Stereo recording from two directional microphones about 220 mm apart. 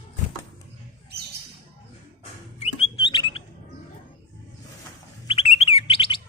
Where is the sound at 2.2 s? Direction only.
30° left (ahead or behind).